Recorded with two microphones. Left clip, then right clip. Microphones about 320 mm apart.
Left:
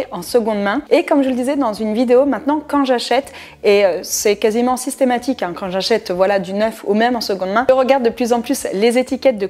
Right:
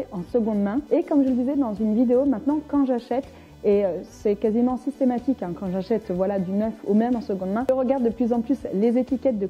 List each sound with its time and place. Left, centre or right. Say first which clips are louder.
0.3 s a woman's voice: left 8 dB; centre